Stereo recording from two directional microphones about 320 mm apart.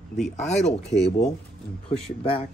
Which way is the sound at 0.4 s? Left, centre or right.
Left.